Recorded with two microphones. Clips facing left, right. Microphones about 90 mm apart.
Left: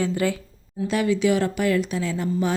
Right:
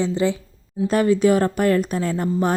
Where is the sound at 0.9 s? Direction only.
45° right (ahead or behind).